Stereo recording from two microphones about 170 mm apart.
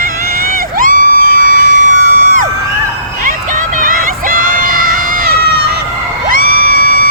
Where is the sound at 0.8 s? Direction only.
50° right (ahead or behind).